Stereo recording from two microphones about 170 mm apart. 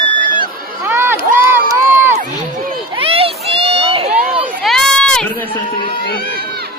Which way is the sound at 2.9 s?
35° right (ahead or behind).